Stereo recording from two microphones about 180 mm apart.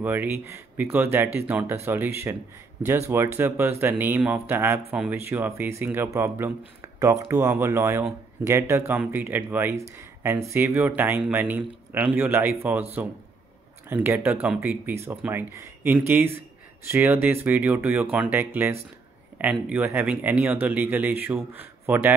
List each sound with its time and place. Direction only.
0.0 s speech: 10° right (ahead or behind)
13.8 s speech: 10° right (ahead or behind)